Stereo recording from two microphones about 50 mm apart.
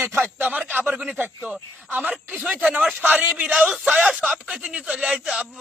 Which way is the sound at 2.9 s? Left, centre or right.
Right.